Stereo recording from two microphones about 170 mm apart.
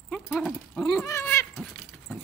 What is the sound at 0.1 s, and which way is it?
Dog, centre (ahead or behind).